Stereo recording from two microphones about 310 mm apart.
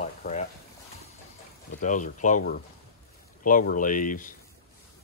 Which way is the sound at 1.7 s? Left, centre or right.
Left.